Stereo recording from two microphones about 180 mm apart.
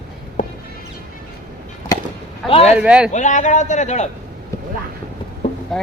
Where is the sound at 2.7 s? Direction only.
5° right (ahead or behind).